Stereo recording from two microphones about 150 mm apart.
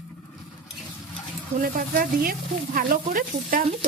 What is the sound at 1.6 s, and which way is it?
Speech, 70° right (ahead or behind).